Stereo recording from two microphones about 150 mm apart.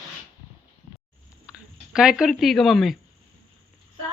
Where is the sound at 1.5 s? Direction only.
5° right (ahead or behind).